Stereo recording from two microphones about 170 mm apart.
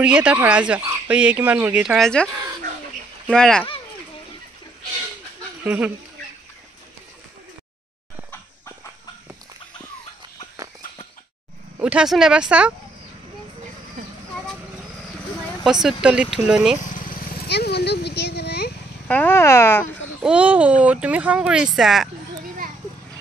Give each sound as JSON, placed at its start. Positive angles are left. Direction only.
{"t": 0.0, "sound": "speech", "side_deg": -5}
{"t": 3.3, "sound": "speech", "side_deg": 5}
{"t": 5.6, "sound": "speech", "side_deg": -10}
{"t": 11.8, "sound": "speech", "side_deg": -5}
{"t": 15.6, "sound": "speech", "side_deg": 0}
{"t": 16.9, "sound": "vehicle", "side_deg": 55}
{"t": 19.0, "sound": "speech", "side_deg": 10}
{"t": 20.2, "sound": "speech", "side_deg": -5}